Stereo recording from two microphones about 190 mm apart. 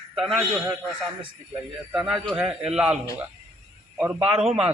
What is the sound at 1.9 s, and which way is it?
Speech, 5° right (ahead or behind).